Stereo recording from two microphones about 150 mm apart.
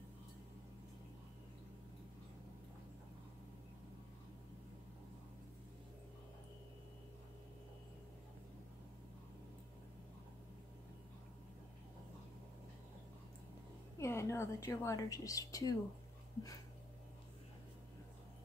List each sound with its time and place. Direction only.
13.9 s a woman's voice: 20° left (ahead or behind)